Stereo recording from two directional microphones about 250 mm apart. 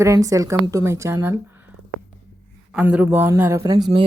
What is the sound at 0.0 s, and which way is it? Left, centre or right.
A woman's voice, centre.